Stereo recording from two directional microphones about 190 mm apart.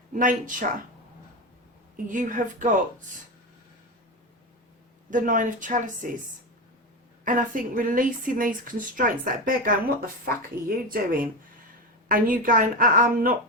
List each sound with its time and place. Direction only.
0.1 s speech: 45° right (ahead or behind)
2.0 s speech: 45° right (ahead or behind)
5.1 s speech: 45° right (ahead or behind)
7.3 s speech: 45° right (ahead or behind)